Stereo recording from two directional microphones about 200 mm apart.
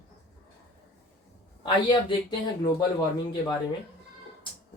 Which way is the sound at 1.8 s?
20° left (ahead or behind).